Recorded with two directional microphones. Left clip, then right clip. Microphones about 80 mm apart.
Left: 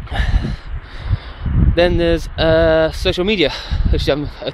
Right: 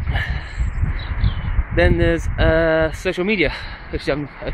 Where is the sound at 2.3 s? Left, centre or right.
Left.